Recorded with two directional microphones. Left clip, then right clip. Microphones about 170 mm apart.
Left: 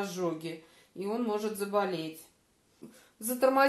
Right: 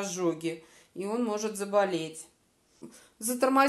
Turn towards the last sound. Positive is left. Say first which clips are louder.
# right 1 dB
turn(degrees=-40)  # may be behind; listen again after turning